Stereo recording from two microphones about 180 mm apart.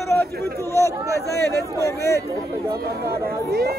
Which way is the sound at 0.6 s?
15° left (ahead or behind).